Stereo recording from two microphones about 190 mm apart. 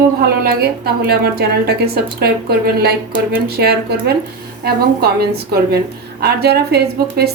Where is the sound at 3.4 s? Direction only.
55° right (ahead or behind).